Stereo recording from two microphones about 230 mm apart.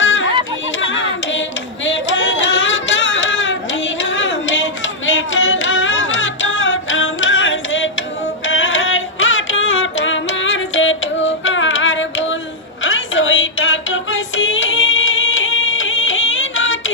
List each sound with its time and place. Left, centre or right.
0.0 s yodeling: left
0.7 s hands: left
1.9 s a sound: left
8.5 s music: left
12.8 s child singing: left